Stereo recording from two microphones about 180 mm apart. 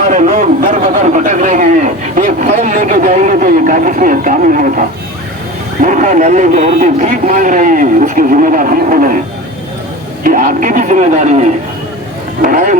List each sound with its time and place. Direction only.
0.1 s a man's voice: 40° right (ahead or behind)
10.2 s a man's voice: 45° right (ahead or behind)